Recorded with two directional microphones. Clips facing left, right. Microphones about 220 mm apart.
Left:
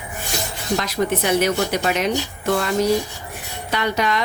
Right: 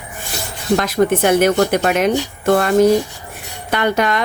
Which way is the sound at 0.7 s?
55° right (ahead or behind).